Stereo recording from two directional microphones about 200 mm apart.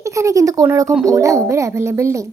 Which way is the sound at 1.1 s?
15° right (ahead or behind).